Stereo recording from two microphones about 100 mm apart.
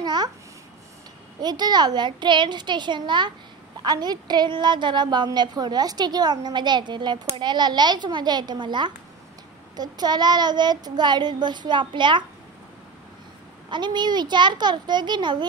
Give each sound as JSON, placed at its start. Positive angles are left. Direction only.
{"t": 0.0, "sound": "babbling", "side_deg": -45}
{"t": 1.4, "sound": "a woman's voice", "side_deg": -45}
{"t": 13.7, "sound": "a woman's voice", "side_deg": -50}